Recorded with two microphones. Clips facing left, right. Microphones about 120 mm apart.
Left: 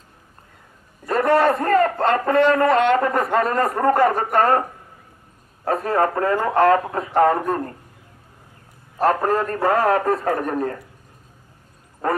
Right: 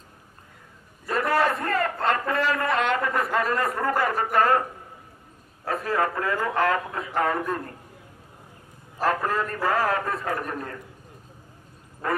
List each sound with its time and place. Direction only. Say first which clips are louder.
1.1 s a man's voice: left 6 dB; 30° left (ahead or behind)
5.7 s a man's voice: left 6 dB; 30° left (ahead or behind)
8.9 s a man's voice: left 6 dB; 35° left (ahead or behind)